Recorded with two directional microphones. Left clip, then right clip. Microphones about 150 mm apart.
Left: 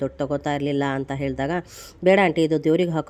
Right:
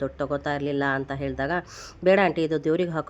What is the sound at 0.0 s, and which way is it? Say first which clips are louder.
Speech: left 2 dB; 50° left (ahead or behind).